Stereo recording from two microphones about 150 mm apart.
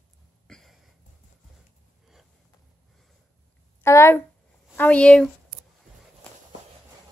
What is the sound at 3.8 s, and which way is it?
Speech, 20° left (ahead or behind).